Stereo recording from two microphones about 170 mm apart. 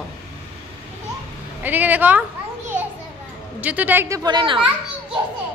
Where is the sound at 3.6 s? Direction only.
10° right (ahead or behind); by 4.6 s 25° right (ahead or behind).